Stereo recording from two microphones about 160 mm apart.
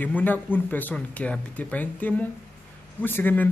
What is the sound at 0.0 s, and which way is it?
Speech, 10° left (ahead or behind).